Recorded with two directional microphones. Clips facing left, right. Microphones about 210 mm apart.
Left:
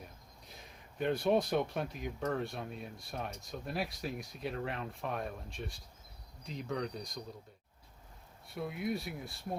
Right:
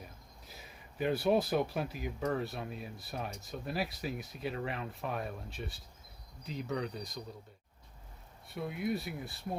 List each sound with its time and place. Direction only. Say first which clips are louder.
0.0 s speech: right 1 dB; 5° right (ahead or behind)
8.4 s speech: right 1 dB; centre (ahead or behind)